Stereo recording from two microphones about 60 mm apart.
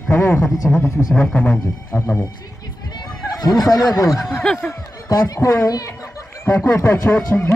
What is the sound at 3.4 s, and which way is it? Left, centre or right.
Speech, left.